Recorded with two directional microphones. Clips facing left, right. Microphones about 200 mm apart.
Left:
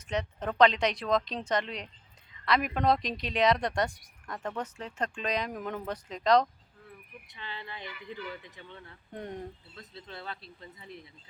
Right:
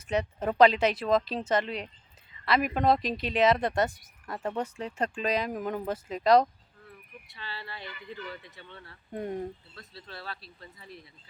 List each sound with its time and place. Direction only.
0.1 s speech: 10° right (ahead or behind)
7.3 s speech: 20° left (ahead or behind)
7.9 s speech: 5° left (ahead or behind)
9.1 s speech: 5° right (ahead or behind)
9.7 s speech: 20° left (ahead or behind)